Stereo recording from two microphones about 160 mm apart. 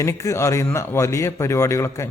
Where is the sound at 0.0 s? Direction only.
20° left (ahead or behind).